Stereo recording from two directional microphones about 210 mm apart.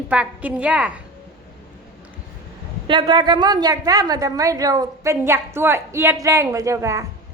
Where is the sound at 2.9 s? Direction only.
20° right (ahead or behind).